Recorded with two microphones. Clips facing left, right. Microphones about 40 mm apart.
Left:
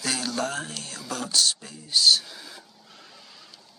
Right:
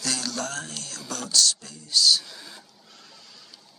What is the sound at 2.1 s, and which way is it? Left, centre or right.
Speech, centre.